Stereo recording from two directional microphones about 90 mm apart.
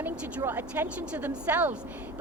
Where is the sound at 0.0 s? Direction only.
20° right (ahead or behind).